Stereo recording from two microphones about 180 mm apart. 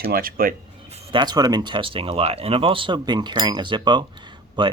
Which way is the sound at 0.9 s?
25° right (ahead or behind).